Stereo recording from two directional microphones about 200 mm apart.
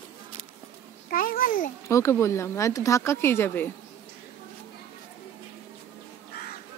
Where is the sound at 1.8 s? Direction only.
15° left (ahead or behind).